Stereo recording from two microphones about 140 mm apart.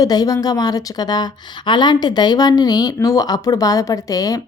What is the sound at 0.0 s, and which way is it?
A woman's voice, 25° left (ahead or behind).